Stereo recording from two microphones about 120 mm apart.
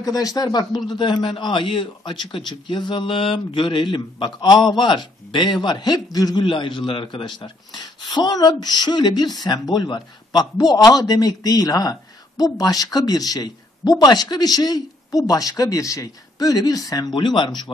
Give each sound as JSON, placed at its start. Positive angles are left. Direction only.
{"t": 0.0, "sound": "speech", "side_deg": 30}
{"t": 6.4, "sound": "speech", "side_deg": 40}